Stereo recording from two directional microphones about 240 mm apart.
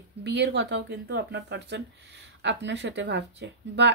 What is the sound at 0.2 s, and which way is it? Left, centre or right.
A woman's voice, right.